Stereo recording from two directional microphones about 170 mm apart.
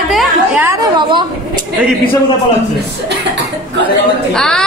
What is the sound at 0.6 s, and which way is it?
Speech, 20° right (ahead or behind).